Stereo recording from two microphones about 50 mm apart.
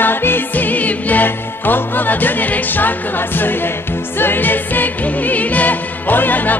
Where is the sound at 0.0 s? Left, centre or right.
Left.